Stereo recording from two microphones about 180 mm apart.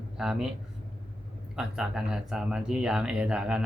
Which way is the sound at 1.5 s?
5° right (ahead or behind).